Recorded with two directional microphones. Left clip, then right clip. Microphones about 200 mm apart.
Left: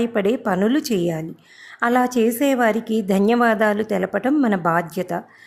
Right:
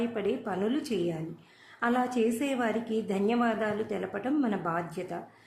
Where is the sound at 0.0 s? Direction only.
50° left (ahead or behind).